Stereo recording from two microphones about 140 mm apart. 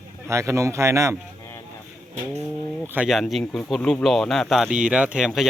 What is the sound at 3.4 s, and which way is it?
Speech, 10° left (ahead or behind).